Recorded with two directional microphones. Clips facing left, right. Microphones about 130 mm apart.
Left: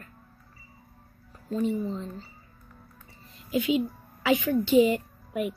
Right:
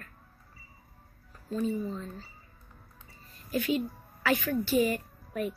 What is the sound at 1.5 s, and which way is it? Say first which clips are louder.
Speech: left 3 dB; 20° left (ahead or behind).